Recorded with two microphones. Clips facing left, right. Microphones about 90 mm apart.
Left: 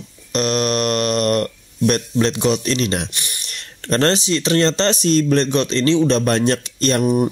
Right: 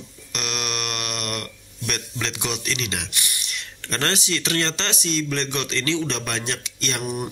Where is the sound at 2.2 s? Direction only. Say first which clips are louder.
Left 9 dB; 35° left (ahead or behind).